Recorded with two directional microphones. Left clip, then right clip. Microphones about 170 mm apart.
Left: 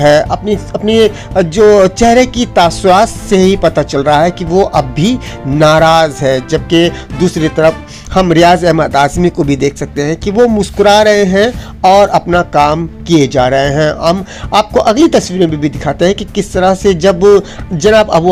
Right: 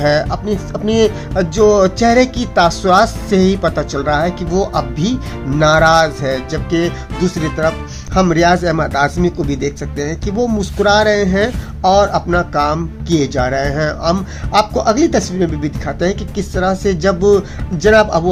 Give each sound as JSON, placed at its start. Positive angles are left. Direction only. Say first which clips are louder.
{"t": 0.0, "sound": "speech", "louder": "left 7 dB", "side_deg": 20}